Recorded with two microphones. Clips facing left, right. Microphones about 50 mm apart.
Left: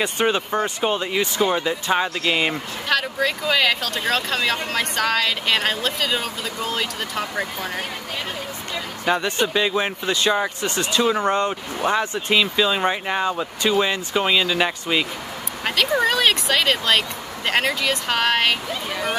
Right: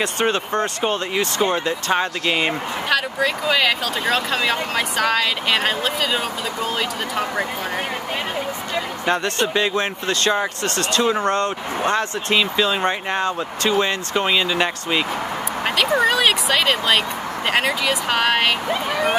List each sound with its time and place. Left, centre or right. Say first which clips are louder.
0.0 s speech: even; centre
9.1 s speech: even; centre
18.9 s speech: right 4 dB; centre